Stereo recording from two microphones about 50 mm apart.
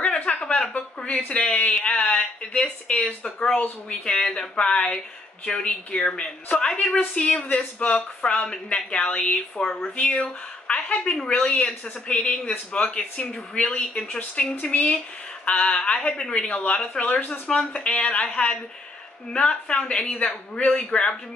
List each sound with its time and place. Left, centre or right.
0.0 s a sound: left
1.5 s speech: left
9.9 s speech: left
10.7 s a sound: left
11.2 s speech: left
17.5 s speech: centre